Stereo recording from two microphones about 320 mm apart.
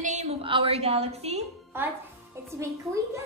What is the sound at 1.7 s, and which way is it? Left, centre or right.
Speech, centre.